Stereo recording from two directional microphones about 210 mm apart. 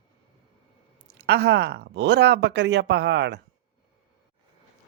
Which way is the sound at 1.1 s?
50° right (ahead or behind).